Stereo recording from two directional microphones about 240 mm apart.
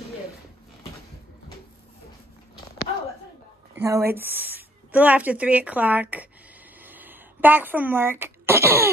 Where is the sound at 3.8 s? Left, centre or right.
Centre.